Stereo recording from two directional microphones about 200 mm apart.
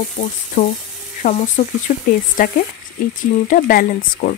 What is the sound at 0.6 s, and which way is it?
Speech, 45° left (ahead or behind).